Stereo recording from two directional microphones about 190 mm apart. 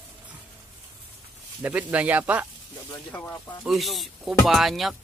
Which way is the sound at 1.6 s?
10° right (ahead or behind).